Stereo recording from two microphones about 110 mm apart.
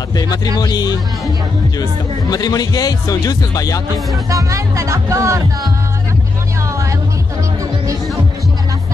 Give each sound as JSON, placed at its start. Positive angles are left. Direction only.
{"t": 0.1, "sound": "speech", "side_deg": 40}
{"t": 4.3, "sound": "music", "side_deg": -30}